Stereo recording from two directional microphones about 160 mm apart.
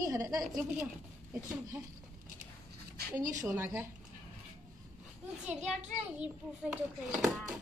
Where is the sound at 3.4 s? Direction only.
10° right (ahead or behind).